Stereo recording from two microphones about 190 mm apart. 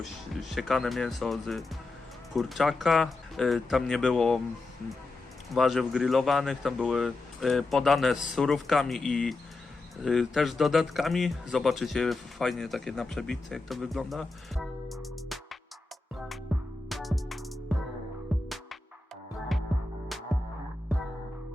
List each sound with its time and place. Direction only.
0.0 s speech: centre (ahead or behind)
5.5 s speech: centre (ahead or behind)
16.5 s music: centre (ahead or behind)